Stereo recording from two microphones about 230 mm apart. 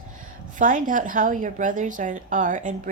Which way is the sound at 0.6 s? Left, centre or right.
Right.